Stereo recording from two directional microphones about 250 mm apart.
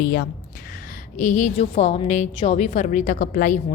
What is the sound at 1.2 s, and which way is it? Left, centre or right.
A woman's voice, left.